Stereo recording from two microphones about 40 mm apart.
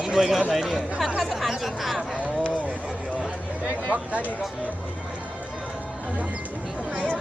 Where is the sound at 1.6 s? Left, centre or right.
Centre.